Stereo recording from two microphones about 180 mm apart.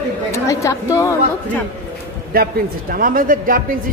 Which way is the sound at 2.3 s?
55° right (ahead or behind).